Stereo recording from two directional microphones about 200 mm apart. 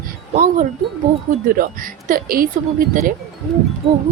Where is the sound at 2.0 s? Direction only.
45° right (ahead or behind).